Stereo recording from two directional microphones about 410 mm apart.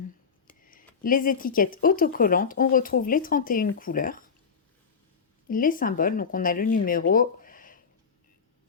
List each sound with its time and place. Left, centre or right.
0.4 s speech: centre
5.5 s speech: centre